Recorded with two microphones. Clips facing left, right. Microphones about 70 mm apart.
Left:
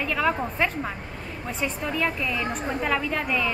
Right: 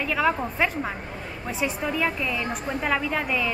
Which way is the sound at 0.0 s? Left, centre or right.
Centre.